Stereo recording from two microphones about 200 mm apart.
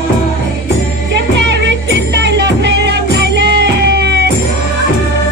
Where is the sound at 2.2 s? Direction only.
60° right (ahead or behind).